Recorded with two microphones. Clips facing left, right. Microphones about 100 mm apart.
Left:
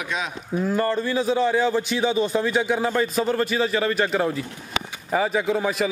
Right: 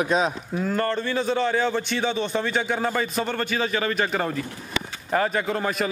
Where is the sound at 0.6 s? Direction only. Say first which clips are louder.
Left 2 dB; 5° left (ahead or behind).